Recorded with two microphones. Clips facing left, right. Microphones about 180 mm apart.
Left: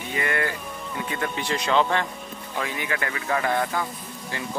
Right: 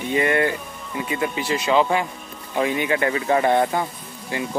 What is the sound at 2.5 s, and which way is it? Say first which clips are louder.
Speech: right 8 dB; 20° right (ahead or behind).